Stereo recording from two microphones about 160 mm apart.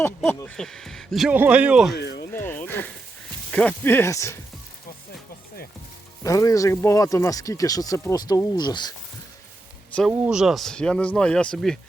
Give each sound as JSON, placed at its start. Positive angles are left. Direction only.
{"t": 0.0, "sound": "speech", "side_deg": 15}
{"t": 2.0, "sound": "speech", "side_deg": 90}
{"t": 2.3, "sound": "speech", "side_deg": 15}
{"t": 6.2, "sound": "speech", "side_deg": 20}
{"t": 10.1, "sound": "speech", "side_deg": -5}